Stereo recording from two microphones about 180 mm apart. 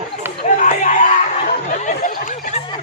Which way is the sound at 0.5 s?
45° left (ahead or behind).